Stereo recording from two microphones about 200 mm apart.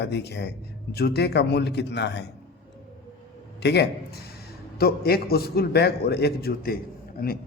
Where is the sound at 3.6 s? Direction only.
55° left (ahead or behind).